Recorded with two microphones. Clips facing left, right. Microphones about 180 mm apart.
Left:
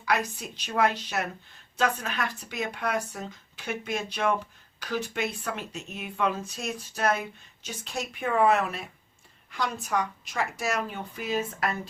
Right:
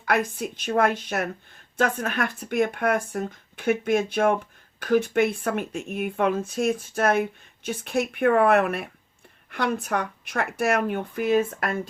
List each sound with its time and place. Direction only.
0.0 s speech: 55° right (ahead or behind)